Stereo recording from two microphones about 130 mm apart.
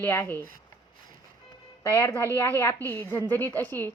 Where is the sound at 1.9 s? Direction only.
15° left (ahead or behind).